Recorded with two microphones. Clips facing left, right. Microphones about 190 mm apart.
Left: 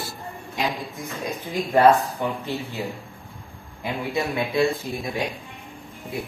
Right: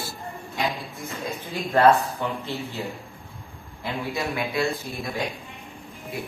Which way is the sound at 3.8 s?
15° left (ahead or behind).